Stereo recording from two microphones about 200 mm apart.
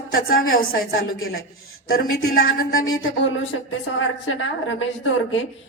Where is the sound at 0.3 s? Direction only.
45° left (ahead or behind).